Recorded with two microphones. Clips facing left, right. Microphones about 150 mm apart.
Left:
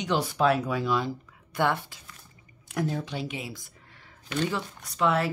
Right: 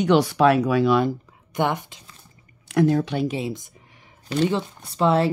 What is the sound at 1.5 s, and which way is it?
Speech, 20° right (ahead or behind).